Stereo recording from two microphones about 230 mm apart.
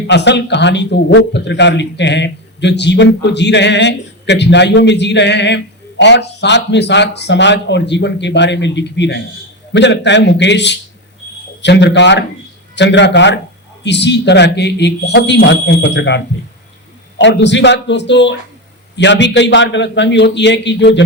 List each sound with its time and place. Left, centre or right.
0.1 s speech: left